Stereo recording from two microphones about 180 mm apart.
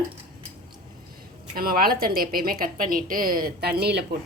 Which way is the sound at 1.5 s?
55° right (ahead or behind).